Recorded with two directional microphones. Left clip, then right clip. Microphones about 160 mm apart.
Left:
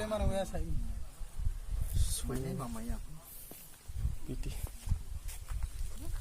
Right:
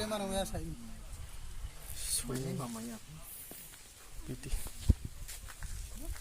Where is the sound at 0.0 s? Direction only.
5° left (ahead or behind).